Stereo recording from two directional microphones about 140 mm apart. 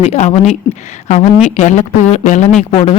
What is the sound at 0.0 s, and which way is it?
A woman's voice, 50° left (ahead or behind).